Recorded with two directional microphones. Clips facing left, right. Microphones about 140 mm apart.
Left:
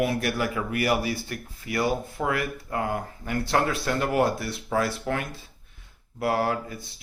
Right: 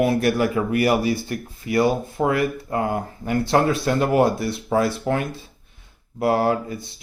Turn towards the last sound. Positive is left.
turn(degrees=-25)  # may be behind; listen again after turning